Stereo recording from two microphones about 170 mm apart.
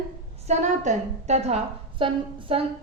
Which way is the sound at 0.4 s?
45° right (ahead or behind).